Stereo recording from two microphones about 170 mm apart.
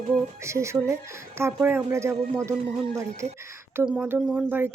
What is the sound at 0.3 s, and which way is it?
Speech, 15° right (ahead or behind).